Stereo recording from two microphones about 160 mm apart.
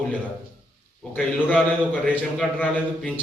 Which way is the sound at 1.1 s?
10° left (ahead or behind).